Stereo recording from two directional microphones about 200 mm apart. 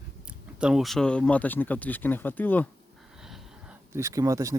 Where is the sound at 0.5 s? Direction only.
5° right (ahead or behind).